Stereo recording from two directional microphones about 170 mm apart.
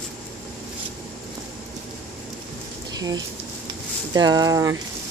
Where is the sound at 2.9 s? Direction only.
25° right (ahead or behind).